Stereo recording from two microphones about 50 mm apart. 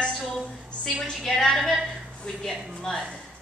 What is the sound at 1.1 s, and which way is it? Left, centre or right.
Speech, centre.